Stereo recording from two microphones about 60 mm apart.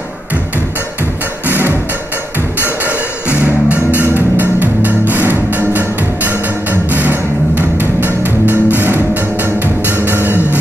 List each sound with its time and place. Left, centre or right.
1.5 s music: right
2.6 s music: right